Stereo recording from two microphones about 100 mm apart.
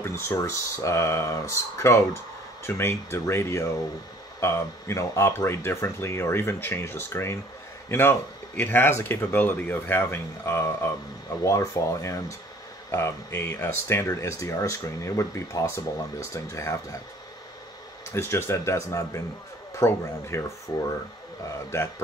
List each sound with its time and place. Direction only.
0.0 s speech: 25° left (ahead or behind)
18.1 s speech: 25° left (ahead or behind)